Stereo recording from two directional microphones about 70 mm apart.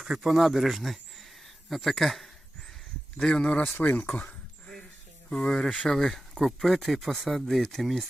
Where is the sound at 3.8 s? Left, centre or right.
Left.